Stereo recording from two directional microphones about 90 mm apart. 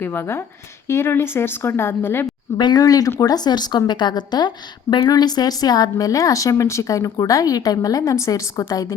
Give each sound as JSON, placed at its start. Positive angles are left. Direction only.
{"t": 0.0, "sound": "a woman's voice", "side_deg": 25}
{"t": 2.6, "sound": "a woman's voice", "side_deg": 50}